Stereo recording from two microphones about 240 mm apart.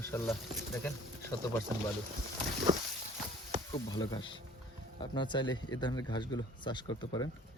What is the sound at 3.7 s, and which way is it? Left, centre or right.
A man's voice, centre.